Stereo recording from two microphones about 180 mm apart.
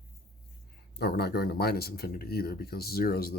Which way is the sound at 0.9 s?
60° left (ahead or behind).